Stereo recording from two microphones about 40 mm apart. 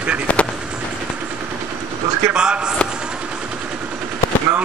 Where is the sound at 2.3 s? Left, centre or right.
Right.